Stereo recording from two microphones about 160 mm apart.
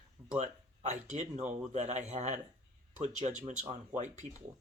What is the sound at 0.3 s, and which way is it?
Speech, 45° right (ahead or behind).